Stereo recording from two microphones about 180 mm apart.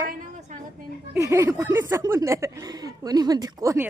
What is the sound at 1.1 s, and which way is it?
A woman's voice, 15° right (ahead or behind).